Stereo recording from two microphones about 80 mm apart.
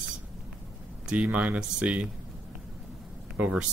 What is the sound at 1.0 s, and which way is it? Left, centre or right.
Speech, centre.